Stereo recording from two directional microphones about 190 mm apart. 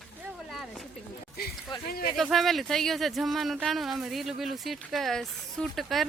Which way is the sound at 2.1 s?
Centre (ahead or behind).